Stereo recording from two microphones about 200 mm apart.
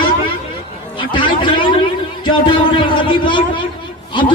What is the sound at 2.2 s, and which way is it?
A man's voice, 25° left (ahead or behind).